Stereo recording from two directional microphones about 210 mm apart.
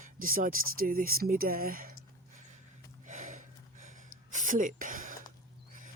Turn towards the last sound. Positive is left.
turn(degrees=-40)  # may be behind; listen again after turning